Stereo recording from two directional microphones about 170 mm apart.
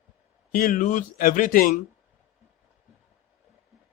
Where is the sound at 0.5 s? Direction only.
50° left (ahead or behind).